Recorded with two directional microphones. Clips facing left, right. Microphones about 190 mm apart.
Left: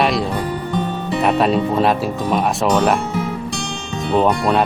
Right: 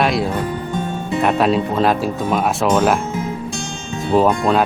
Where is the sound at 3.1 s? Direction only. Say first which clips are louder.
Left 1 dB; 65° left (ahead or behind).